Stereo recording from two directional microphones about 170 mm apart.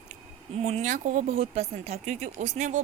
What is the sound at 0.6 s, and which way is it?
Speech, 40° right (ahead or behind).